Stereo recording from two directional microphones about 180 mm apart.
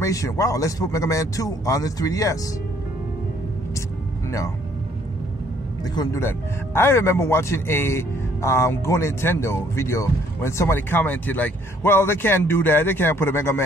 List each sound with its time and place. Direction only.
0.0 s a man's voice: 20° left (ahead or behind)
5.9 s speech: 15° left (ahead or behind)